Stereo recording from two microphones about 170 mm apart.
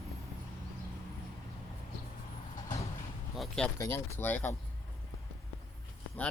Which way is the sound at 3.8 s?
15° left (ahead or behind).